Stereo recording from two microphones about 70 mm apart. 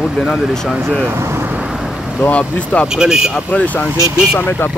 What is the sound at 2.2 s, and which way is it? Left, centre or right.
Speech, centre.